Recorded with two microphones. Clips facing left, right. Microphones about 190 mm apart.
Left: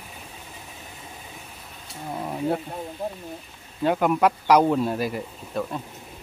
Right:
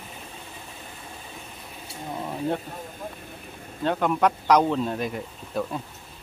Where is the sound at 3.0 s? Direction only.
40° left (ahead or behind).